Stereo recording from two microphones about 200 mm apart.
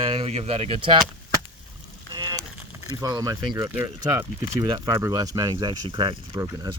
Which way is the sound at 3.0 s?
15° right (ahead or behind).